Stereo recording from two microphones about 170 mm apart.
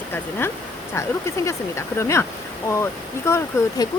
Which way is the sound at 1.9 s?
15° left (ahead or behind).